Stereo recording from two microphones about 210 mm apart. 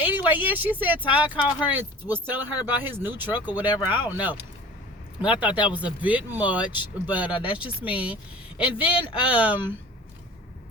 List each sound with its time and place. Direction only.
0.0 s speech: 10° right (ahead or behind)
0.9 s speech: 25° left (ahead or behind)
1.2 s speech: 5° right (ahead or behind)
3.7 s speech: 20° left (ahead or behind)
5.5 s speech: 20° left (ahead or behind)
5.7 s speech: 5° right (ahead or behind)